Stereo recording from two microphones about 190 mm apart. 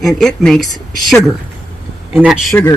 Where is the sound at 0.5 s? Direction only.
20° left (ahead or behind).